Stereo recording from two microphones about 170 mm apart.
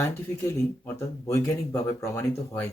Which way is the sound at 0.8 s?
15° left (ahead or behind).